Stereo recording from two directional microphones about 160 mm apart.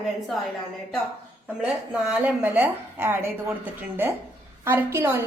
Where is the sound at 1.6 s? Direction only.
5° right (ahead or behind).